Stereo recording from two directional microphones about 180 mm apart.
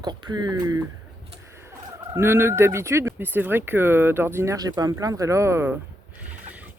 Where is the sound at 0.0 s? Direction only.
25° right (ahead or behind).